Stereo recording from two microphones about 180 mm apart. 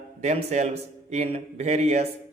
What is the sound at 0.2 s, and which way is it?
A man's voice, 40° right (ahead or behind).